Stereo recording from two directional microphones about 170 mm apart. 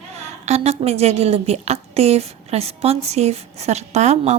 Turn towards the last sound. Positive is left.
turn(degrees=-40)  # may be behind; listen again after turning